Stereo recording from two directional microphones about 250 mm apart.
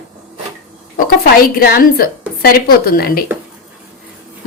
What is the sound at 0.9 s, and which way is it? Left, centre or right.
Speech, left.